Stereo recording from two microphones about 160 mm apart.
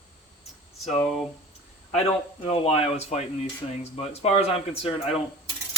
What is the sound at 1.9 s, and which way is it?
Speech, 40° left (ahead or behind).